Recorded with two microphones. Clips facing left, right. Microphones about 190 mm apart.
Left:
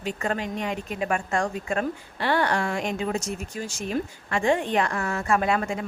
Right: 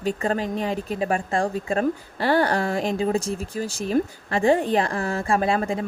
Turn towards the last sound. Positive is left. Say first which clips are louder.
# right 2 dB
turn(degrees=-30)  # may be behind; listen again after turning